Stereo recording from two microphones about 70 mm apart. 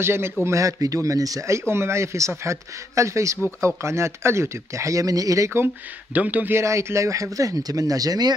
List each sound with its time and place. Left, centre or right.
0.0 s speech: right
1.6 s speech: right
6.1 s a man's voice: right
6.5 s speech: right